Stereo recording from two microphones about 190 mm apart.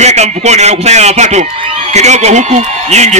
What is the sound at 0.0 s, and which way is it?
A man's voice, 35° right (ahead or behind).